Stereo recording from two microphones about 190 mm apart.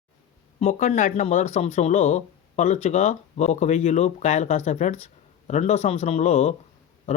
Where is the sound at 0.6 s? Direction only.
40° left (ahead or behind).